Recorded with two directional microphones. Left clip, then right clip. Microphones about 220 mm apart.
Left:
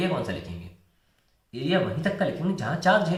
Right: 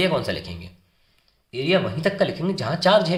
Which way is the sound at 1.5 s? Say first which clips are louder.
Right 4 dB; 45° right (ahead or behind).